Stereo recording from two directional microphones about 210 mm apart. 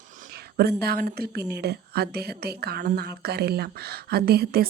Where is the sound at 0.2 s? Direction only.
45° right (ahead or behind).